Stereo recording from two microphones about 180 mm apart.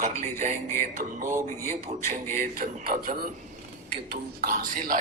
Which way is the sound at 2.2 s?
50° right (ahead or behind).